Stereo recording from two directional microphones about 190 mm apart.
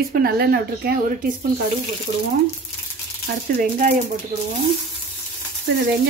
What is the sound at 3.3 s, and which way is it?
Speech, 65° right (ahead or behind).